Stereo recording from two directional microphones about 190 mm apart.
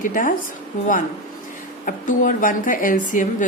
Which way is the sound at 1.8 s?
45° left (ahead or behind).